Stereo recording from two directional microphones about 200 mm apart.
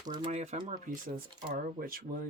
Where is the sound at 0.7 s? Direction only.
45° right (ahead or behind).